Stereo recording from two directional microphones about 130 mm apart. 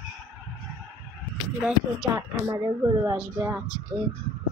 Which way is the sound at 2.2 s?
25° right (ahead or behind).